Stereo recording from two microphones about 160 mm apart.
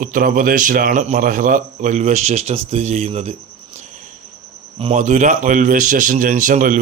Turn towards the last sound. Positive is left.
turn(degrees=-55)  # may be behind; listen again after turning